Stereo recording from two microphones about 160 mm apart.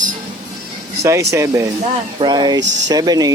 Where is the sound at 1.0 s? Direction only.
15° right (ahead or behind).